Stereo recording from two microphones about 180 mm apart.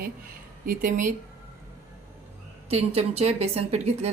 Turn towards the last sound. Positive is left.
turn(degrees=-35)  # may be behind; listen again after turning